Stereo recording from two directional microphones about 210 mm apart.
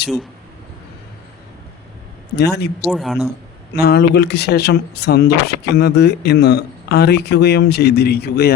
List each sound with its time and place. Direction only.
2.3 s speech: 50° left (ahead or behind)
2.8 s speech: centre (ahead or behind)
3.8 s speech: 50° left (ahead or behind)